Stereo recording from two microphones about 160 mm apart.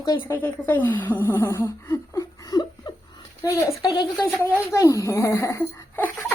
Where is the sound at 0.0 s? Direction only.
20° left (ahead or behind).